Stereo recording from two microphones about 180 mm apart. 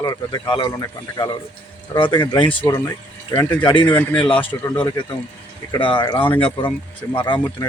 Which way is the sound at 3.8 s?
10° left (ahead or behind).